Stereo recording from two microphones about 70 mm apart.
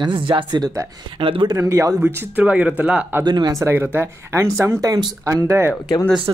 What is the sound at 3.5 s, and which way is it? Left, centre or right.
Speech, right.